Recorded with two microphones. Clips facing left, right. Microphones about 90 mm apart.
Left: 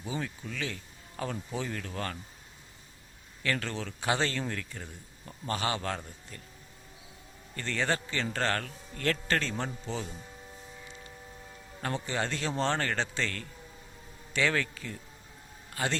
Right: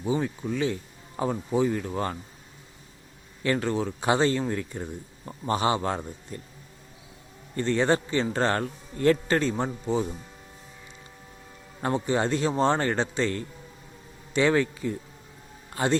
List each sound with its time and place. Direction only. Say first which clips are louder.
0.0 s speech: right 9 dB; 20° right (ahead or behind)
3.4 s speech: right 8 dB; 20° right (ahead or behind)
7.5 s speech: right 8 dB; 20° right (ahead or behind)
11.8 s speech: right 7 dB; 20° right (ahead or behind)